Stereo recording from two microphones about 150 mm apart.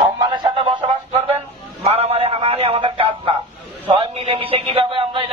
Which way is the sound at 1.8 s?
40° right (ahead or behind).